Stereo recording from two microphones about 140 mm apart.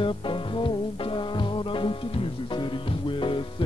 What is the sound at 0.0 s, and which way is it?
Music, 35° left (ahead or behind).